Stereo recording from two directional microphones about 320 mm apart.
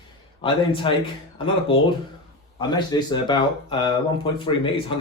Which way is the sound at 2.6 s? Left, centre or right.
Centre.